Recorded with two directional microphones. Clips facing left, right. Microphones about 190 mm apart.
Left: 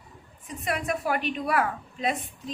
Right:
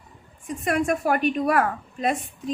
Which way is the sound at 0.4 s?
50° right (ahead or behind).